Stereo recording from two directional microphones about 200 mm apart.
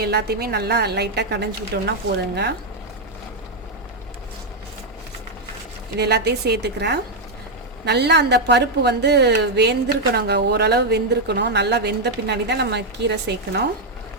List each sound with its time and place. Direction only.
0.0 s a woman's voice: 55° right (ahead or behind)
6.0 s a woman's voice: 55° right (ahead or behind)